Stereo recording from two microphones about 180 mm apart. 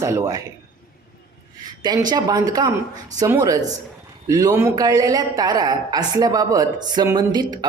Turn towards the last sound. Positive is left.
turn(degrees=-25)  # may be behind; listen again after turning